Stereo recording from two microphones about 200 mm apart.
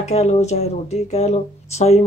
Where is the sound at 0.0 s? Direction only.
30° left (ahead or behind).